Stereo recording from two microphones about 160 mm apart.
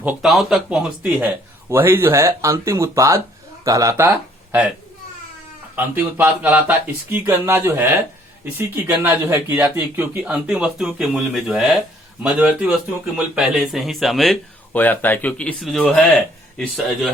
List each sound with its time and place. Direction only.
0.0 s speech: 10° right (ahead or behind)
5.7 s speech: 10° right (ahead or behind)
14.8 s speech: 10° left (ahead or behind)